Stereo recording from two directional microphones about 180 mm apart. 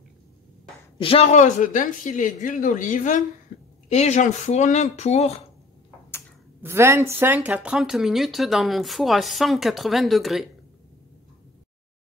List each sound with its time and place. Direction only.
0.9 s speech: 30° left (ahead or behind); by 3.3 s 45° left (ahead or behind)
3.5 s a sound: 45° left (ahead or behind)
3.9 s speech: 40° left (ahead or behind)
6.6 s a woman's voice: 15° right (ahead or behind)